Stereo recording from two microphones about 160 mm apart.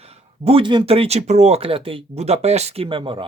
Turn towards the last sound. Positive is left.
turn(degrees=-30)  # may be behind; listen again after turning